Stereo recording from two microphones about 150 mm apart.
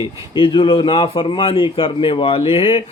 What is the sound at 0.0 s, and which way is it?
Speech, 35° left (ahead or behind).